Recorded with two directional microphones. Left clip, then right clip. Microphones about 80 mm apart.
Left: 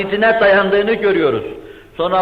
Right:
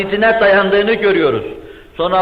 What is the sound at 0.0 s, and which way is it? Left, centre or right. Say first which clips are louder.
A man's voice: right 1 dB; left.